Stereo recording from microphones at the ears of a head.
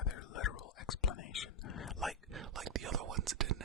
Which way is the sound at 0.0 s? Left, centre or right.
Left.